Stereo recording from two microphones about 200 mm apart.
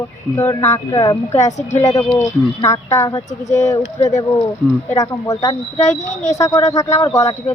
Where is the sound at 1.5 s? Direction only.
35° left (ahead or behind).